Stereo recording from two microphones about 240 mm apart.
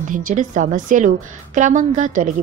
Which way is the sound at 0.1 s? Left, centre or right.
Right.